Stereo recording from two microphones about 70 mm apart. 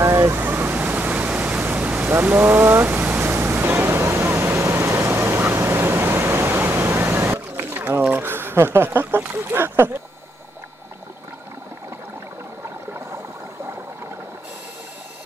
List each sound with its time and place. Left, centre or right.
0.0 s pink noise: right
1.6 s waves: right
8.1 s a sound: right